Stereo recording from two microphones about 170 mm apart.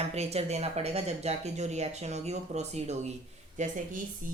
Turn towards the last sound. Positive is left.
turn(degrees=-50)  # may be behind; listen again after turning